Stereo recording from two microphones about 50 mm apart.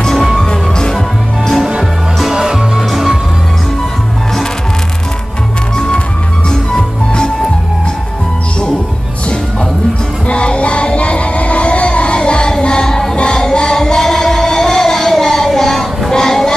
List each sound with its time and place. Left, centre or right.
0.0 s music: centre
1.5 s music: centre
5.8 s music: centre
10.2 s music: left